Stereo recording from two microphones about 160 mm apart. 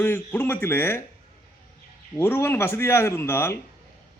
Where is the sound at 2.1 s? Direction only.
15° left (ahead or behind).